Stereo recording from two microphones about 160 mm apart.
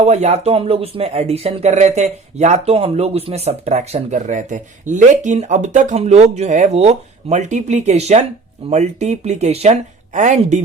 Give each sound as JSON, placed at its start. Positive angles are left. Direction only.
{"t": 0.0, "sound": "speech", "side_deg": -45}